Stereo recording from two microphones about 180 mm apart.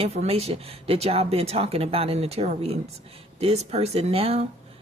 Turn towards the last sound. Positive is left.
turn(degrees=-35)  # may be behind; listen again after turning